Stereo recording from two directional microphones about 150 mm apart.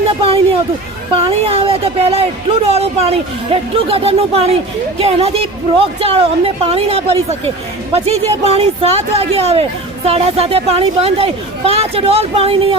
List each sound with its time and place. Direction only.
0.2 s speech: 40° right (ahead or behind)